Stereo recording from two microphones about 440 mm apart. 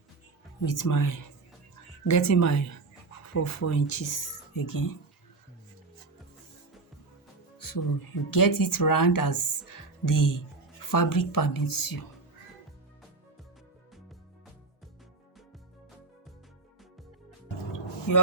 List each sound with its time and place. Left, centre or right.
0.6 s speech: left
7.6 s speech: left